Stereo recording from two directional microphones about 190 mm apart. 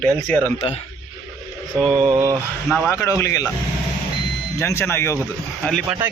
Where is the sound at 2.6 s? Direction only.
Centre (ahead or behind).